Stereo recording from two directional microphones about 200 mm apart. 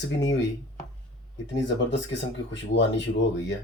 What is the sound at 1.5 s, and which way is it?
Speech, 65° left (ahead or behind).